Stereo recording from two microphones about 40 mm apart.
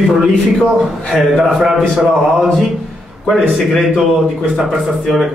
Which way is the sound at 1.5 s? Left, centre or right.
Centre.